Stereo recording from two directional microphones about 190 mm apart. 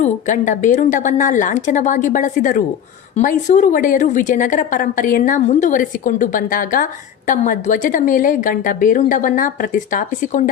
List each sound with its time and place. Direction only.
0.0 s a woman's voice: 40° left (ahead or behind)